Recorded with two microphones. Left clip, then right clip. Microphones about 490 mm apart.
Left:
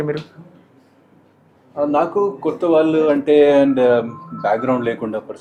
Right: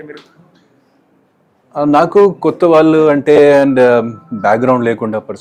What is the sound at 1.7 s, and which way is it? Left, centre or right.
Speech, right.